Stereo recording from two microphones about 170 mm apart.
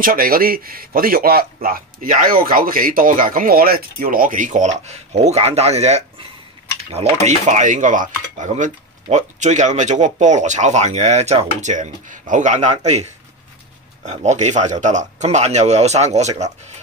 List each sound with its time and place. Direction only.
0.0 s speech: 55° right (ahead or behind); by 6.0 s 40° right (ahead or behind)
7.2 s speech: 45° right (ahead or behind)